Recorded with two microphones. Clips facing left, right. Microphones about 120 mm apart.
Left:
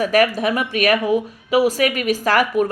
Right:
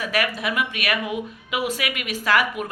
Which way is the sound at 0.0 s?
40° left (ahead or behind).